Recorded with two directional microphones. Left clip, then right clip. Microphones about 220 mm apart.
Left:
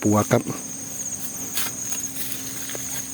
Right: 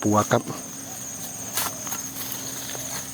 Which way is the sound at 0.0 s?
30° left (ahead or behind).